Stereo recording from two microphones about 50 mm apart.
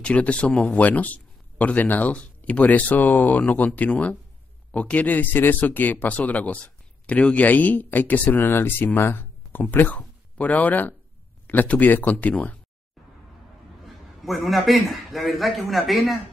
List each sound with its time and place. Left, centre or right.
0.0 s a man's voice: left
14.2 s a man's voice: centre